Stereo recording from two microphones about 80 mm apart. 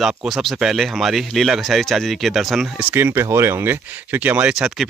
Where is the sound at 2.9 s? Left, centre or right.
Right.